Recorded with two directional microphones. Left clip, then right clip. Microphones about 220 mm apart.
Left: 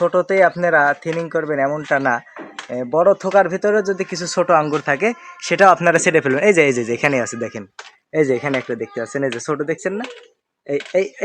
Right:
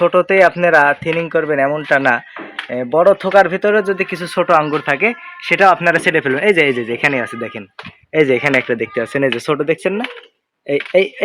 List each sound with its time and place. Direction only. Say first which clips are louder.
0.3 s speech: right 4 dB; 30° right (ahead or behind); by 4.9 s 5° left (ahead or behind)
4.9 s a man's voice: right 3 dB; 20° left (ahead or behind)
8.1 s speech: right 4 dB; 15° right (ahead or behind)
8.6 s speech: right 6 dB; 45° right (ahead or behind)